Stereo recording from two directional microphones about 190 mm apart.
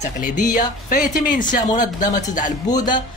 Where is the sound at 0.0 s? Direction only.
45° left (ahead or behind).